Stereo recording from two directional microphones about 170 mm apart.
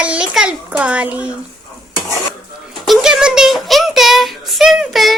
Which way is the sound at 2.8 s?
5° right (ahead or behind).